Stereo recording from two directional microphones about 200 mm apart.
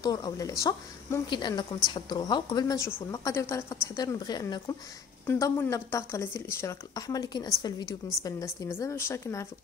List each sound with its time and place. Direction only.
0.0 s a woman's voice: 20° left (ahead or behind)